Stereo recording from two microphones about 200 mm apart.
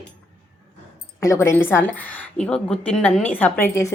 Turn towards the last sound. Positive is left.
turn(degrees=15)  # may be behind; listen again after turning